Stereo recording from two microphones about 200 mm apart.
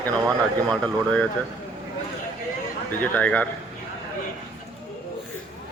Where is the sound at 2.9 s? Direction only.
10° left (ahead or behind).